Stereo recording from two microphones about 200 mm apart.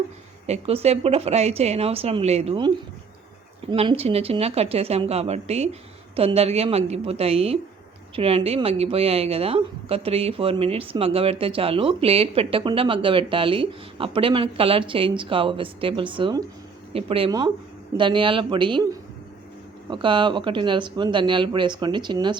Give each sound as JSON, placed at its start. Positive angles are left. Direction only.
{"t": 0.4, "sound": "a woman's voice", "side_deg": -30}
{"t": 19.9, "sound": "a woman's voice", "side_deg": -25}